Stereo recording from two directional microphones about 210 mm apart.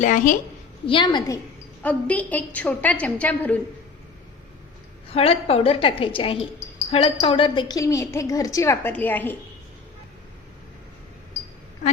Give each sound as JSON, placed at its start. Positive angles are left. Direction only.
{"t": 0.0, "sound": "a woman's voice", "side_deg": 35}
{"t": 0.9, "sound": "a woman's voice", "side_deg": 20}
{"t": 1.8, "sound": "a woman's voice", "side_deg": 5}
{"t": 5.1, "sound": "a woman's voice", "side_deg": 30}